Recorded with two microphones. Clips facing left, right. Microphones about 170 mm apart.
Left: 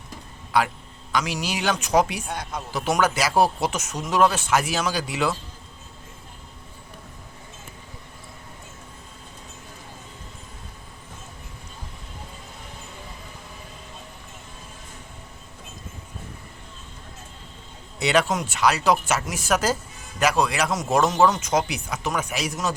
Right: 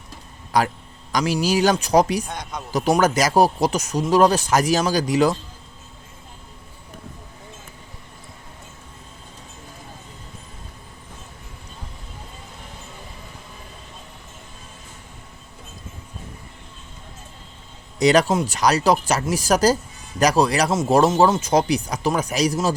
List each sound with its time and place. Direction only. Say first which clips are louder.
0.5 s speech: right 2 dB; 40° right (ahead or behind)
2.2 s speech: even; 5° left (ahead or behind)
2.7 s speech: right 5 dB; 40° right (ahead or behind)
18.0 s speech: right 5 dB; 40° right (ahead or behind)